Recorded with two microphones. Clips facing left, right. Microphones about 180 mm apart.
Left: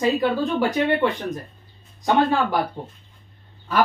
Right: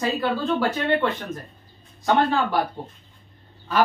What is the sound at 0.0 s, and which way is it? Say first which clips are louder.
A woman's voice: left 3 dB; 15° left (ahead or behind).